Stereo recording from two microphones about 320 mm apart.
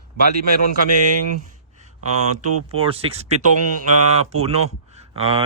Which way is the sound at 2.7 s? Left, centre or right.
Centre.